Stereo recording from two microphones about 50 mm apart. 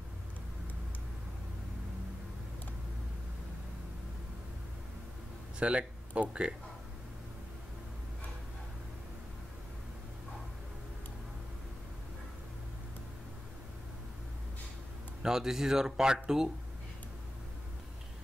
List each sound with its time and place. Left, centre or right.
5.6 s speech: right
15.2 s speech: centre